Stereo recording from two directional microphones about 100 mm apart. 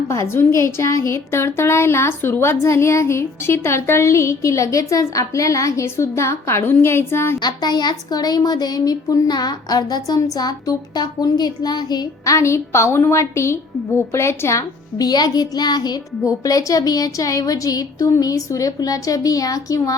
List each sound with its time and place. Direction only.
0.1 s a woman's voice: 30° left (ahead or behind)
7.4 s a woman's voice: 45° left (ahead or behind)